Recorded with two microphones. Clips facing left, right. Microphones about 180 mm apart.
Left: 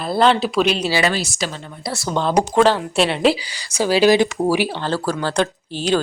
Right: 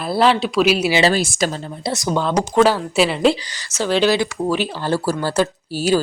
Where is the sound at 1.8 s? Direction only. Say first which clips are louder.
Right 3 dB; 20° right (ahead or behind).